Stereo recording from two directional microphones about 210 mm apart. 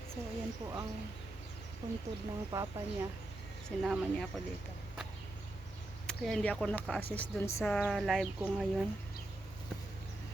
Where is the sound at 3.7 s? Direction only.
Centre (ahead or behind).